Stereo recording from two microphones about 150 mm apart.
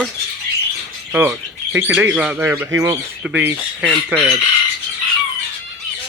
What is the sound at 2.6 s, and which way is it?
Speech, 20° right (ahead or behind).